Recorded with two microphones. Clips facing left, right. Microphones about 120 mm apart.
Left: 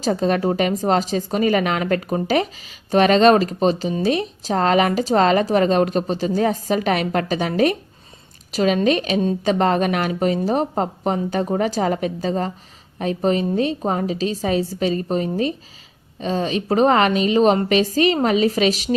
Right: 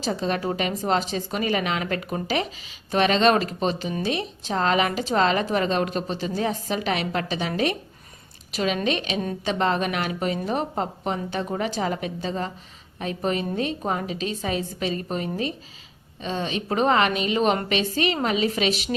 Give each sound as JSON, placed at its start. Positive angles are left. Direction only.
{"t": 0.0, "sound": "speech", "side_deg": 45}